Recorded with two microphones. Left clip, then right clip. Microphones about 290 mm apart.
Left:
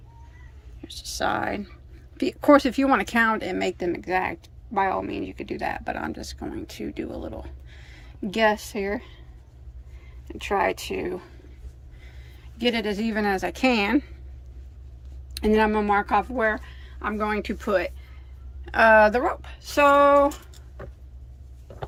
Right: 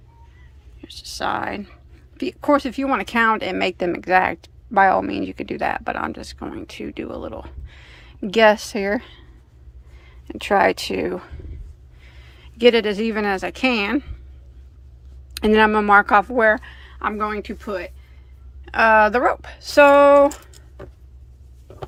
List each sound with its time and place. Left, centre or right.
0.8 s speech: centre
12.5 s speech: centre
15.4 s speech: centre
19.2 s speech: centre